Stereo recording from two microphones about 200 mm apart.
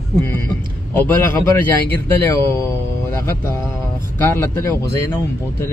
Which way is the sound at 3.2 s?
10° left (ahead or behind).